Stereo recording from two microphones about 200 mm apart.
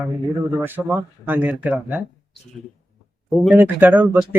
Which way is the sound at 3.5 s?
10° right (ahead or behind).